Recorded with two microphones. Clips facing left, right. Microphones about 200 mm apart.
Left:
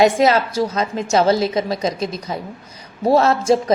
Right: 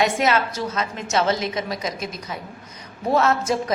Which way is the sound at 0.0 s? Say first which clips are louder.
Left 6 dB; 35° left (ahead or behind).